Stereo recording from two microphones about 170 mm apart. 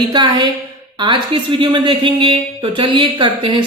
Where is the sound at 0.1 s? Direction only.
25° right (ahead or behind).